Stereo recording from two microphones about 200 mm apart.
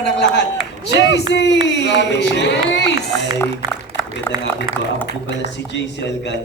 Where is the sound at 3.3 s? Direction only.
15° left (ahead or behind).